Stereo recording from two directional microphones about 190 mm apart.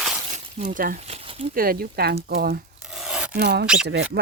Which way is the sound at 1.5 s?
50° right (ahead or behind).